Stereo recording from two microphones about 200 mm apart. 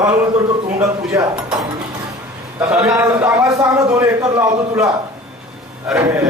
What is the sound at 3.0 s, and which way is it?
Speech, 10° right (ahead or behind).